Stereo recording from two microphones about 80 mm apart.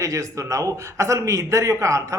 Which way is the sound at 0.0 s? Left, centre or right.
Right.